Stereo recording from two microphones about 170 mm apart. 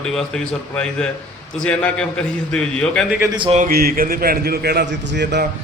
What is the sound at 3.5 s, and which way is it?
A man's voice, 55° right (ahead or behind).